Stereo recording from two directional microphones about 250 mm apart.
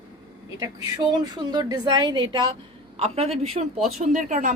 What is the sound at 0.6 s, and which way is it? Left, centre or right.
A woman's voice, centre.